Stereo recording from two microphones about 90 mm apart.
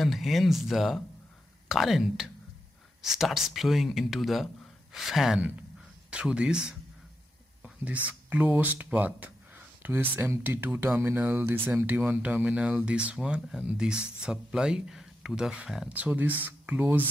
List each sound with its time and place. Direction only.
0.0 s speech: centre (ahead or behind)
5.4 s a sound: 15° right (ahead or behind)
7.8 s speech: 15° right (ahead or behind)
15.9 s speech: 20° right (ahead or behind)